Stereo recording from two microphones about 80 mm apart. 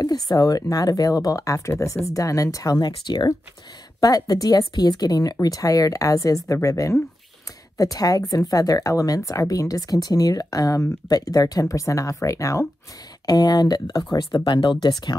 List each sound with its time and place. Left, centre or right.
0.0 s speech: left
4.0 s speech: left
7.7 s speech: left
13.2 s speech: left
14.1 s speech: left